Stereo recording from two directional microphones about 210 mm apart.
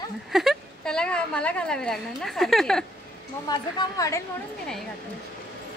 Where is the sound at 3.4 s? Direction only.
20° left (ahead or behind).